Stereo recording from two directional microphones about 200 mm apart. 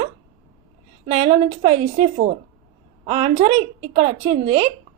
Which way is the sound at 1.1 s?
35° right (ahead or behind).